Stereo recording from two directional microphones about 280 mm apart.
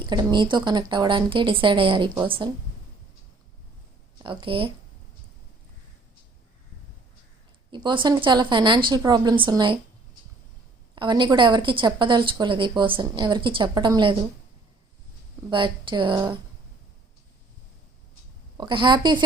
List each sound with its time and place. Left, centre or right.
0.0 s a woman's voice: centre
4.2 s a woman's voice: centre
7.7 s a woman's voice: centre
10.9 s a woman's voice: centre
15.4 s a woman's voice: centre
18.5 s a woman's voice: centre